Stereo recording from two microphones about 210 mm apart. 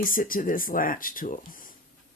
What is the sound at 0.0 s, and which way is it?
Speech, 40° left (ahead or behind).